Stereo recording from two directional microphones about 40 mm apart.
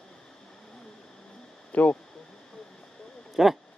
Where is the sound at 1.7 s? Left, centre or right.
Left.